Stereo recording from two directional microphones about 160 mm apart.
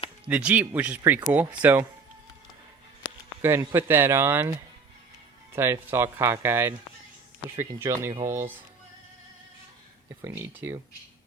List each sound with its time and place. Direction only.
0.3 s speech: 10° right (ahead or behind)
3.4 s speech: 15° right (ahead or behind)
5.5 s speech: 15° right (ahead or behind)
10.2 s speech: 15° right (ahead or behind)